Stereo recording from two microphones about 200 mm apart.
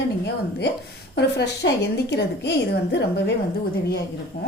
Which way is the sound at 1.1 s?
55° left (ahead or behind).